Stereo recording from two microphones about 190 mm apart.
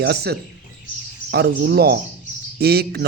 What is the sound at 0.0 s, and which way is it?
A man's voice, 60° right (ahead or behind).